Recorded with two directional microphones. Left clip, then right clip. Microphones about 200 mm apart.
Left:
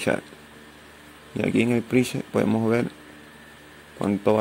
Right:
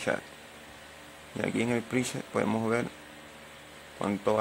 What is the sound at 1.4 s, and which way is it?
Speech, 10° left (ahead or behind).